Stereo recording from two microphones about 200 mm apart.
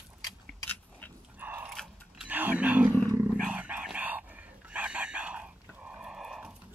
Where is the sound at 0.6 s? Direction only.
10° left (ahead or behind).